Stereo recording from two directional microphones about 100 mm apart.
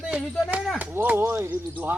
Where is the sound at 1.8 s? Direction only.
20° right (ahead or behind).